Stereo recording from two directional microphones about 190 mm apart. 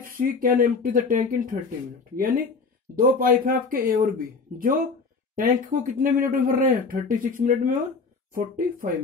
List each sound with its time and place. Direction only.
0.0 s speech: 45° right (ahead or behind)